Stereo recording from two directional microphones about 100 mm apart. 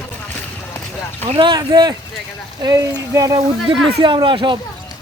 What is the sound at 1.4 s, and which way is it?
Speech, 45° right (ahead or behind).